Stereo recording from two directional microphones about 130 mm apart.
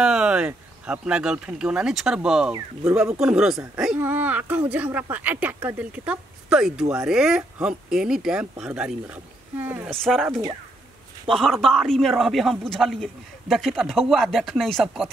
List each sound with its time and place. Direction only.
0.0 s a man's voice: 5° right (ahead or behind)
9.8 s a man's voice: centre (ahead or behind)